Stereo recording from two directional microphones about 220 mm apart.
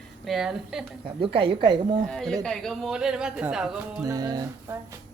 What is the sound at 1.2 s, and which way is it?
Speech, 25° right (ahead or behind).